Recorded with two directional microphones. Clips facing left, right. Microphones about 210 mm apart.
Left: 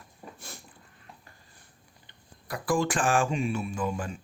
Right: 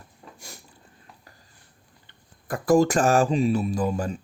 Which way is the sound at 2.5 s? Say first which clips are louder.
Right 8 dB; 40° right (ahead or behind).